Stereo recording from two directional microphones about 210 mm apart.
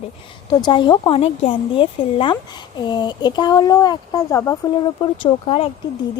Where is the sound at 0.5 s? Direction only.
20° left (ahead or behind).